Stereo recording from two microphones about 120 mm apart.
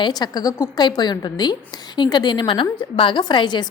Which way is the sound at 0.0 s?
35° left (ahead or behind).